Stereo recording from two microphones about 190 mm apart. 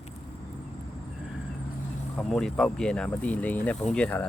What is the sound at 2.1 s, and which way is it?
Speech, centre (ahead or behind).